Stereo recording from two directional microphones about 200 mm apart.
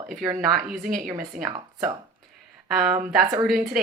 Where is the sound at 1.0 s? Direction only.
5° right (ahead or behind).